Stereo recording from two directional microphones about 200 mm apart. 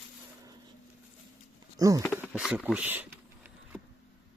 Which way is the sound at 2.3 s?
5° right (ahead or behind).